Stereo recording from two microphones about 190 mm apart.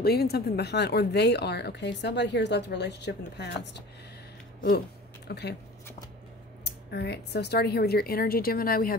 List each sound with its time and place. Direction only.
0.0 s speech: 55° left (ahead or behind)
4.6 s a sound: 50° left (ahead or behind)
5.3 s speech: 60° left (ahead or behind)
6.6 s speech: 60° left (ahead or behind)